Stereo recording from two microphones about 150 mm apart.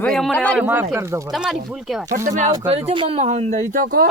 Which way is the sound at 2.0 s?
55° right (ahead or behind).